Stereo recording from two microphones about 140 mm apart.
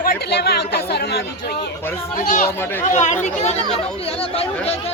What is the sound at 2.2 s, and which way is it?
Speech, 65° left (ahead or behind).